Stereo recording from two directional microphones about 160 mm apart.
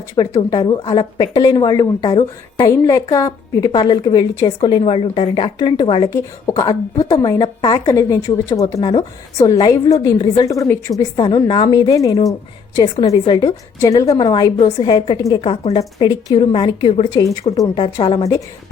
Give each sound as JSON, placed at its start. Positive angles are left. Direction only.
{"t": 0.3, "sound": "a woman's voice", "side_deg": 30}
{"t": 15.4, "sound": "a woman's voice", "side_deg": 40}
{"t": 16.0, "sound": "a woman's voice", "side_deg": 30}
{"t": 17.2, "sound": "a woman's voice", "side_deg": 20}